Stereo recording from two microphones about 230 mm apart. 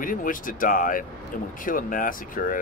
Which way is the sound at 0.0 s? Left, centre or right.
Left.